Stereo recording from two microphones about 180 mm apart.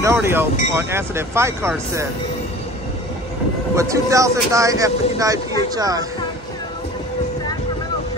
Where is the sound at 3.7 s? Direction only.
15° right (ahead or behind).